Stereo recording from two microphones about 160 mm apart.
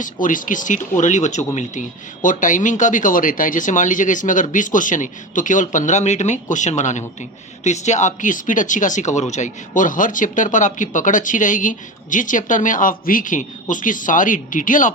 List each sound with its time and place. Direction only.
0.0 s speech: 55° left (ahead or behind)